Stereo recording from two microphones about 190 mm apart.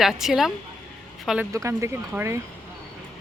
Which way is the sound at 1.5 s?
15° right (ahead or behind).